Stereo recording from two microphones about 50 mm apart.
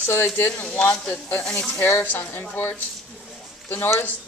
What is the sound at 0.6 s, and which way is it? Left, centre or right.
Speech, left.